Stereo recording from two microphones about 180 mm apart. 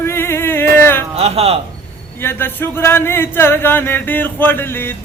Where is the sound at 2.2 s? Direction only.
10° left (ahead or behind).